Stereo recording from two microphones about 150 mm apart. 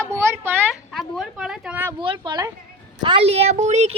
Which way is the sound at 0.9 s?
Centre (ahead or behind).